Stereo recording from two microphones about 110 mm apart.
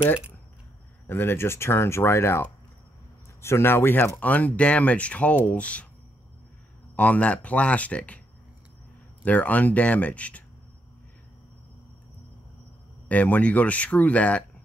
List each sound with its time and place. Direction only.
1.0 s speech: 20° left (ahead or behind)
7.0 s speech: 15° left (ahead or behind)
9.2 s speech: 15° left (ahead or behind)
13.1 s speech: 15° left (ahead or behind)